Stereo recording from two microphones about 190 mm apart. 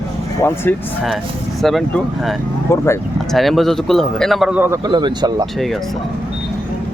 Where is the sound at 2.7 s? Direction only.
15° left (ahead or behind).